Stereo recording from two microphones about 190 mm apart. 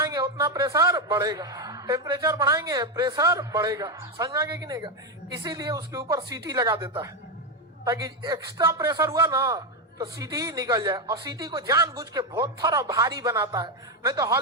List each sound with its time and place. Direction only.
0.0 s a man's voice: 20° right (ahead or behind)